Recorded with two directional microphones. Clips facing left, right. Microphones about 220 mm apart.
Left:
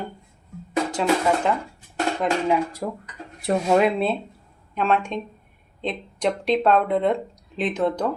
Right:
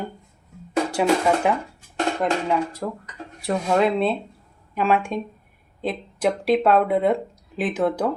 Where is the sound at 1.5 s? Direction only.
10° right (ahead or behind).